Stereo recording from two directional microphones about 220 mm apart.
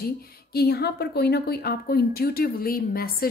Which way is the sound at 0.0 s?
45° left (ahead or behind).